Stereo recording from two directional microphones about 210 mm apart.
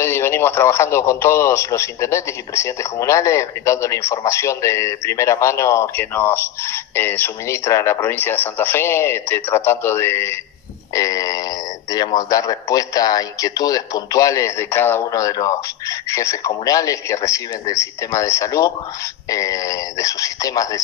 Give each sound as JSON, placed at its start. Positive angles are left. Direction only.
{"t": 0.0, "sound": "speech", "side_deg": 10}